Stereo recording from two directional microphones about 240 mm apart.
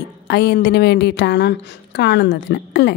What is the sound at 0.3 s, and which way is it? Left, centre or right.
A woman's voice, left.